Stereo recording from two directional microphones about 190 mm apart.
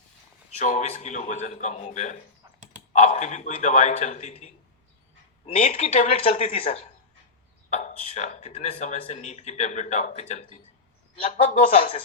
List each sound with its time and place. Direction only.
0.6 s speech: 40° left (ahead or behind)